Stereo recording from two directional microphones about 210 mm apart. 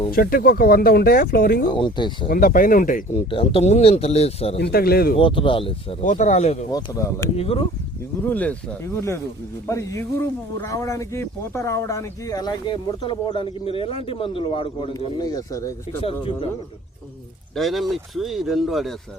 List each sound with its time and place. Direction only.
0.1 s speech: 45° left (ahead or behind)
1.7 s speech: 20° left (ahead or behind)
2.3 s speech: 40° left (ahead or behind)
3.2 s speech: 25° left (ahead or behind)
4.5 s speech: 50° left (ahead or behind)
5.1 s speech: 25° left (ahead or behind)
6.7 s speech: 15° left (ahead or behind)
7.3 s speech: 30° left (ahead or behind)
8.2 s speech: 5° left (ahead or behind)
17.5 s speech: centre (ahead or behind)